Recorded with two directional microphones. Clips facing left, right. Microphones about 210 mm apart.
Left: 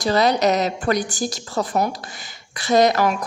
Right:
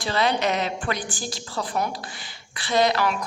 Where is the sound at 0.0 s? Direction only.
40° left (ahead or behind).